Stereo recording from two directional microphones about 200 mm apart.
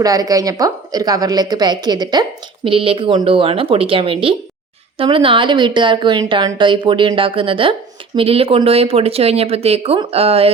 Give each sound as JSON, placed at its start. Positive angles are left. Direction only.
{"t": 0.0, "sound": "a woman's voice", "side_deg": -20}